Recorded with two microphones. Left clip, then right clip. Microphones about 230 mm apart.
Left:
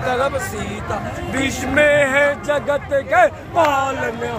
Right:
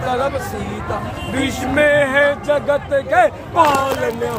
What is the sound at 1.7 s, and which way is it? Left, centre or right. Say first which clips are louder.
Speech: even; centre.